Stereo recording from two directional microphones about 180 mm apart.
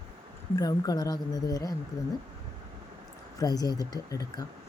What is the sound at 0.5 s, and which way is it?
Speech, 20° left (ahead or behind).